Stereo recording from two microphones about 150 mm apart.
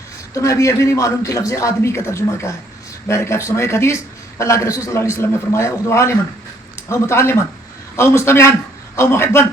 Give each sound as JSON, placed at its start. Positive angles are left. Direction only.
{"t": 0.3, "sound": "a man's voice", "side_deg": 20}